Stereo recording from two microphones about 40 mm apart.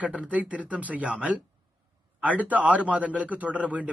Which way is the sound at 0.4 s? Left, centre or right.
Right.